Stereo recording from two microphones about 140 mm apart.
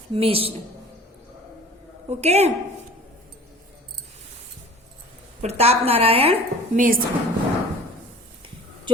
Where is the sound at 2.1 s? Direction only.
50° right (ahead or behind).